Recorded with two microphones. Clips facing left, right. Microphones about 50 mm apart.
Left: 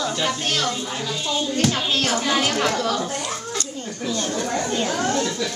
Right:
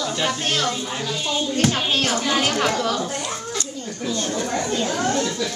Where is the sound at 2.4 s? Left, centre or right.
Centre.